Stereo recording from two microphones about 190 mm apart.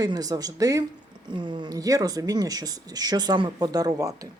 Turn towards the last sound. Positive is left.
turn(degrees=-20)  # may be behind; listen again after turning